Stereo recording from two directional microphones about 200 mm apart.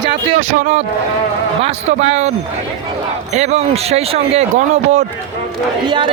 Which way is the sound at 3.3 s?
35° right (ahead or behind).